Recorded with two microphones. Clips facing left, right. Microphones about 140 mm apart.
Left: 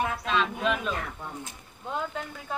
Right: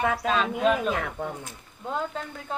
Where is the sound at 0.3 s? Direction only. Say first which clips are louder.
Right 4 dB; 40° right (ahead or behind).